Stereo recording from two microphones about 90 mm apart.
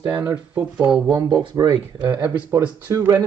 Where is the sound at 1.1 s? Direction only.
55° right (ahead or behind).